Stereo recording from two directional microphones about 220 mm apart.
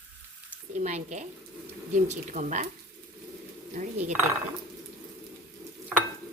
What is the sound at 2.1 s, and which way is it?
Speech, 30° right (ahead or behind).